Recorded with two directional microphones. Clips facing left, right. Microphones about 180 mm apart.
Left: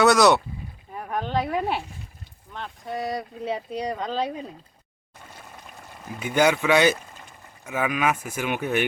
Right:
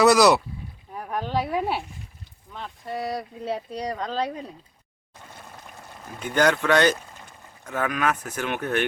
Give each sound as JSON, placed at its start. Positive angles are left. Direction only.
{"t": 0.0, "sound": "speech", "side_deg": 0}
{"t": 6.0, "sound": "speech", "side_deg": 10}